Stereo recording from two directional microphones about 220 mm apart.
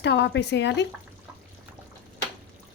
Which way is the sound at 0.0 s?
50° left (ahead or behind).